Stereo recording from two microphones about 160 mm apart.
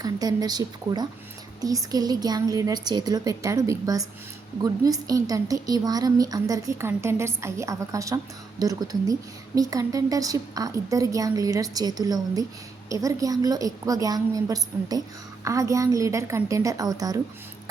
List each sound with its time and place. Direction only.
0.0 s a woman's voice: 25° right (ahead or behind)